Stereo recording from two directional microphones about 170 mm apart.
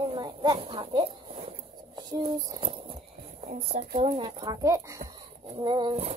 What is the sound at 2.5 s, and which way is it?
Speech, 30° right (ahead or behind).